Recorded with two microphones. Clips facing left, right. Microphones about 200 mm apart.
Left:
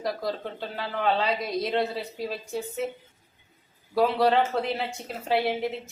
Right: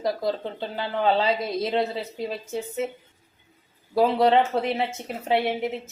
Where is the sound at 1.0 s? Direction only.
25° right (ahead or behind).